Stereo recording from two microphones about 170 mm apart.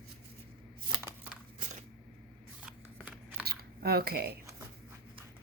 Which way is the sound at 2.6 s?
5° right (ahead or behind).